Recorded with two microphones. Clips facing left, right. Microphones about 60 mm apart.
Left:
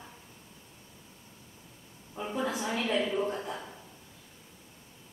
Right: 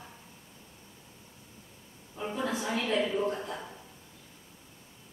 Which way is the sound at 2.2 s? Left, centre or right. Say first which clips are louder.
Even; centre.